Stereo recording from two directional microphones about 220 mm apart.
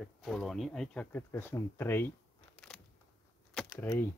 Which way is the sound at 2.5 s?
Centre (ahead or behind).